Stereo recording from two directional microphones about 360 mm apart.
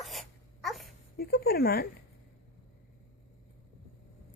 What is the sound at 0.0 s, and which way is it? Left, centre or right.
Wail, centre.